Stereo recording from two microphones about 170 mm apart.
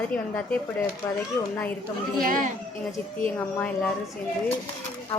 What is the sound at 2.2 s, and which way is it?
Speech, 55° right (ahead or behind).